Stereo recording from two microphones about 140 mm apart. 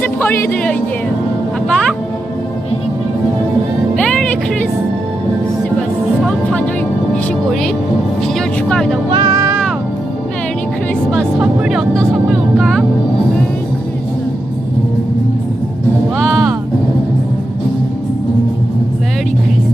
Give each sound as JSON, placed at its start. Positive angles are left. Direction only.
{"t": 0.0, "sound": "speech", "side_deg": 15}
{"t": 1.7, "sound": "music", "side_deg": 5}
{"t": 3.9, "sound": "music", "side_deg": 5}
{"t": 6.2, "sound": "music", "side_deg": 10}
{"t": 8.4, "sound": "vehicle", "side_deg": 5}
{"t": 9.1, "sound": "music", "side_deg": -25}
{"t": 11.1, "sound": "speech", "side_deg": -5}
{"t": 16.1, "sound": "music", "side_deg": 0}